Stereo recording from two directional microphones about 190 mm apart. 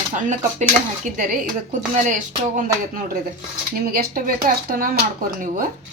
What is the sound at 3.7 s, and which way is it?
Speech, 50° right (ahead or behind).